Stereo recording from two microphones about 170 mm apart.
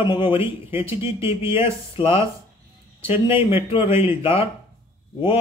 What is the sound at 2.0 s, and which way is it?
Speech, 30° left (ahead or behind).